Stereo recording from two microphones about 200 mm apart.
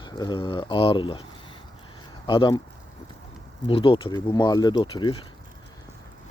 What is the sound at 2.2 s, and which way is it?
Speech, 20° left (ahead or behind).